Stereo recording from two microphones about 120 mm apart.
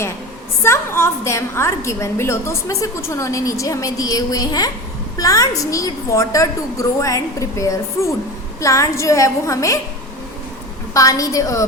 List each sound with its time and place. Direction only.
0.6 s a woman's voice: 20° left (ahead or behind)
10.9 s a woman's voice: 30° left (ahead or behind)